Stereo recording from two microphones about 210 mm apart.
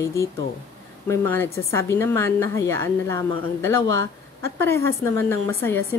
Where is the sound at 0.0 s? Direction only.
15° left (ahead or behind).